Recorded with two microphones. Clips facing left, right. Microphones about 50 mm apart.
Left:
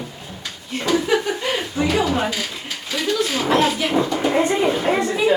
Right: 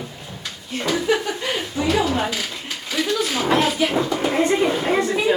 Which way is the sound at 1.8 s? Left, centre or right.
Centre.